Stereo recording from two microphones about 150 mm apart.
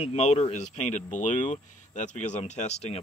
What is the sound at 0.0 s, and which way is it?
Speech, 50° left (ahead or behind).